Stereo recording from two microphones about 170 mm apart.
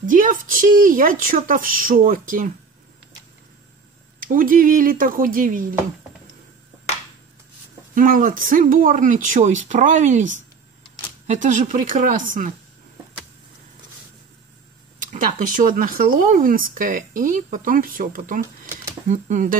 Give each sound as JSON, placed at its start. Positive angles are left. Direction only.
{"t": 0.0, "sound": "speech", "side_deg": -50}
{"t": 4.2, "sound": "speech", "side_deg": -55}
{"t": 7.9, "sound": "speech", "side_deg": -50}
{"t": 15.0, "sound": "speech", "side_deg": -50}
{"t": 18.4, "sound": "a sound", "side_deg": -15}
{"t": 19.0, "sound": "speech", "side_deg": -45}